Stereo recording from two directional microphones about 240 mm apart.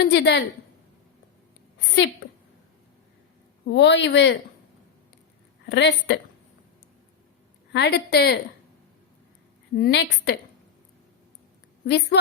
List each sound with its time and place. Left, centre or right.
0.0 s a woman's voice: left
3.7 s a woman's voice: left
5.6 s a woman's voice: left
7.7 s a woman's voice: left
9.7 s a woman's voice: left
11.9 s a woman's voice: left